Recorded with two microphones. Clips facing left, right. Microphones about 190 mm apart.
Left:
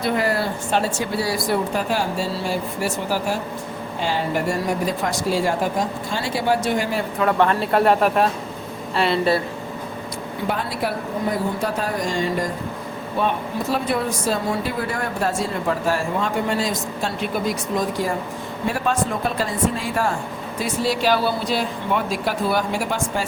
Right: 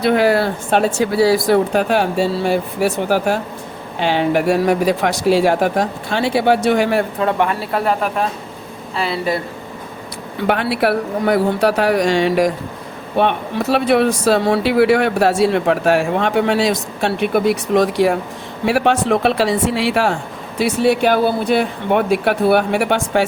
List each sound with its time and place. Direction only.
0.0 s speech: 75° right (ahead or behind)
7.3 s speech: 10° right (ahead or behind)
7.7 s speech: centre (ahead or behind)
10.4 s speech: 70° right (ahead or behind)